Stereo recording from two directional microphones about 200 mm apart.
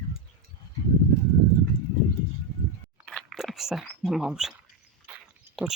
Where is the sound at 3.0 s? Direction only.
Centre (ahead or behind).